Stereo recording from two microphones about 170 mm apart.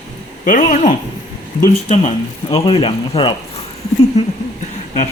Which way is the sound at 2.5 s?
30° left (ahead or behind).